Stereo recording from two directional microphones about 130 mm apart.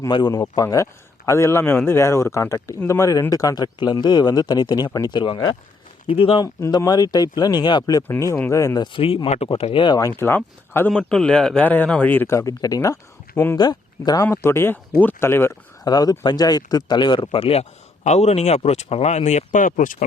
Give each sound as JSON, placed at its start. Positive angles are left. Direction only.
{"t": 0.1, "sound": "a man's voice", "side_deg": 35}
{"t": 6.4, "sound": "speech", "side_deg": 30}
{"t": 8.0, "sound": "speech", "side_deg": 20}
{"t": 10.1, "sound": "speech", "side_deg": 15}
{"t": 10.9, "sound": "speech", "side_deg": 5}
{"t": 12.4, "sound": "speech", "side_deg": 30}
{"t": 13.6, "sound": "speech", "side_deg": 30}
{"t": 14.3, "sound": "a man's voice", "side_deg": 20}
{"t": 15.8, "sound": "speech", "side_deg": 30}